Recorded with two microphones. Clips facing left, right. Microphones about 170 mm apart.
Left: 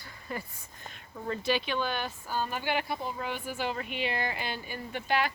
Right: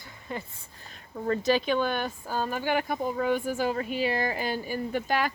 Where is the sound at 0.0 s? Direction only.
20° right (ahead or behind).